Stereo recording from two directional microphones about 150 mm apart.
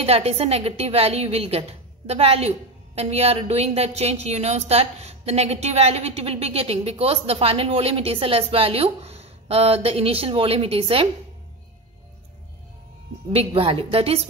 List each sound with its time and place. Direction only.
0.0 s a woman's voice: 40° right (ahead or behind)
13.5 s a woman's voice: 35° right (ahead or behind)